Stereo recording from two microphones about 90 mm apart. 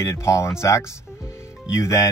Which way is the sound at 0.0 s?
35° left (ahead or behind).